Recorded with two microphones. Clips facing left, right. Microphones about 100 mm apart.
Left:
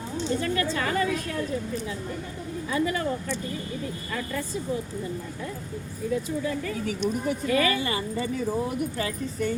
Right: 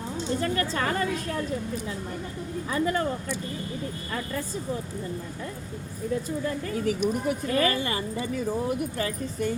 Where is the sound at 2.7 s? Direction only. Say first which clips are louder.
Right 1 dB; 40° right (ahead or behind).